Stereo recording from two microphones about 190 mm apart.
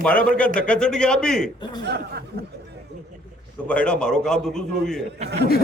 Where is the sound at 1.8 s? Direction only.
60° right (ahead or behind).